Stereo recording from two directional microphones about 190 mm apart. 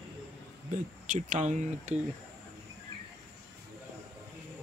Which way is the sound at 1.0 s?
40° right (ahead or behind).